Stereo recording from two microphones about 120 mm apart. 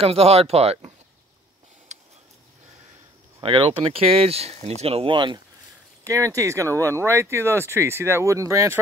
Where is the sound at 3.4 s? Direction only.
50° right (ahead or behind).